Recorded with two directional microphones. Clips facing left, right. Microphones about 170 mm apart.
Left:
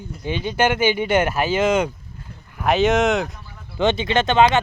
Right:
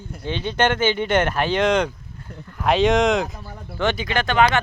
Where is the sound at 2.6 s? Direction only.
Centre (ahead or behind).